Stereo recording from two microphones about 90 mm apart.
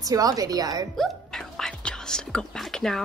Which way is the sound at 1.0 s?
5° left (ahead or behind).